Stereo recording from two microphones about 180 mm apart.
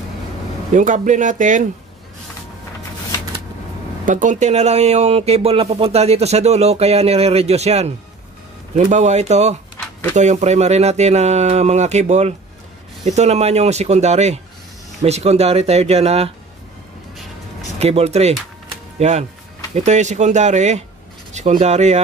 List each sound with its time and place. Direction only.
0.7 s speech: 45° right (ahead or behind)
4.0 s speech: 45° right (ahead or behind)
17.7 s speech: 35° right (ahead or behind)